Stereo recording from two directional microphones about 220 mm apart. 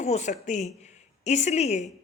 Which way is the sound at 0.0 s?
30° left (ahead or behind).